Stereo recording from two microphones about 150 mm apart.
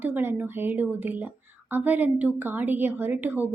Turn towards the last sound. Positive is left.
turn(degrees=-10)  # may be behind; listen again after turning